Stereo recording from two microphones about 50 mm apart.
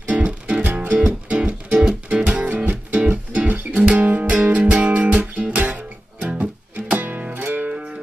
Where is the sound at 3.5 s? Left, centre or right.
Centre.